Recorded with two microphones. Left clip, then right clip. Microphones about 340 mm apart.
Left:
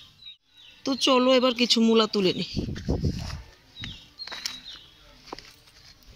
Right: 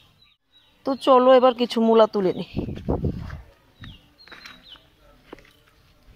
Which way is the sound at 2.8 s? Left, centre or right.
Right.